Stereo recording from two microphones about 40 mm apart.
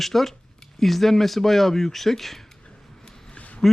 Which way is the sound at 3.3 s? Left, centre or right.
Left.